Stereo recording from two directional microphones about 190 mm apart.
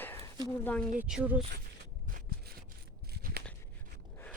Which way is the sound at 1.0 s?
5° right (ahead or behind).